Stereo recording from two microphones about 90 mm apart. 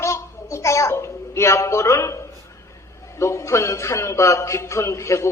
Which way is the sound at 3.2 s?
35° left (ahead or behind).